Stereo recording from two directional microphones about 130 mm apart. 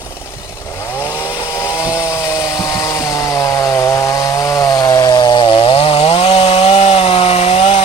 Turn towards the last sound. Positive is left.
turn(degrees=50)  # may be behind; listen again after turning